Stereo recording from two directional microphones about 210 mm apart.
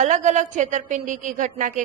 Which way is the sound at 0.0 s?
35° right (ahead or behind).